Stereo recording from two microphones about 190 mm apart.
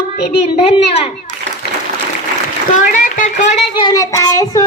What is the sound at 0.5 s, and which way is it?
Speech, 30° left (ahead or behind).